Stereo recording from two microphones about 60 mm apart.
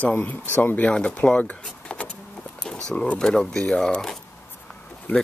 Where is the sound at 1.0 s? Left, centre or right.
Centre.